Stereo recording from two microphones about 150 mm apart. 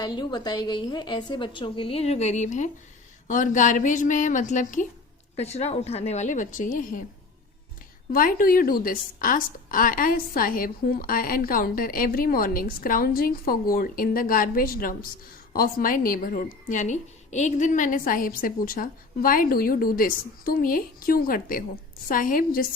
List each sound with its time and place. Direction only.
0.0 s a woman's voice: 30° left (ahead or behind); by 4.9 s 55° left (ahead or behind)
5.4 s a woman's voice: 45° left (ahead or behind); by 7.0 s 60° left (ahead or behind)
8.1 s a woman's voice: 70° left (ahead or behind)